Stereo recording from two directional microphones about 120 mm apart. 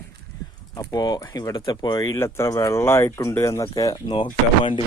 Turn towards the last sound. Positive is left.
turn(degrees=45)  # may be behind; listen again after turning